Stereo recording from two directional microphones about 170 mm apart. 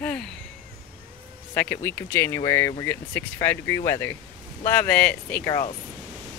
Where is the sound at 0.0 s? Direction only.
5° left (ahead or behind).